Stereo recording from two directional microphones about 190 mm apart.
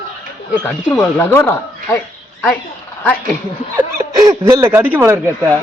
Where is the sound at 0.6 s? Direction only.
10° left (ahead or behind).